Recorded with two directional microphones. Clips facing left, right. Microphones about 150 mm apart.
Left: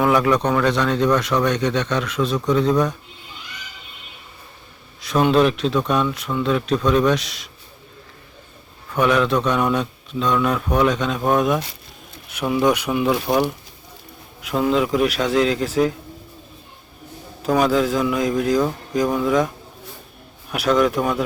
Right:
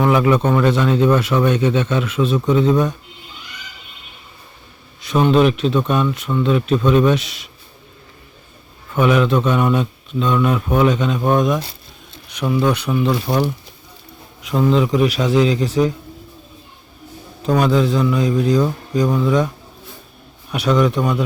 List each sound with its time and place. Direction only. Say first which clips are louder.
0.0 s speech: right 2 dB; centre (ahead or behind)
4.9 s speech: right 2 dB; centre (ahead or behind)
8.9 s speech: right 2 dB; centre (ahead or behind)
14.4 s speech: right 3 dB; 5° left (ahead or behind)
17.4 s speech: right 2 dB; 5° left (ahead or behind)
20.5 s speech: right 1 dB; centre (ahead or behind)